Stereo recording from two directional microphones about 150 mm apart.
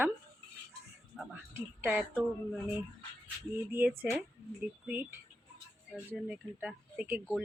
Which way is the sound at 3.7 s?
10° right (ahead or behind).